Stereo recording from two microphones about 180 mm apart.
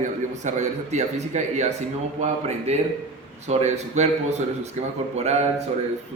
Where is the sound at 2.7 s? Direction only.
35° right (ahead or behind).